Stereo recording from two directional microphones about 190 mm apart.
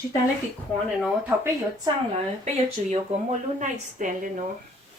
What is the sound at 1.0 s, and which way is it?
Speech, 10° right (ahead or behind).